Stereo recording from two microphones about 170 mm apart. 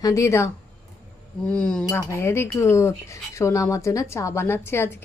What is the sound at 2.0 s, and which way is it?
A woman's voice, 15° left (ahead or behind).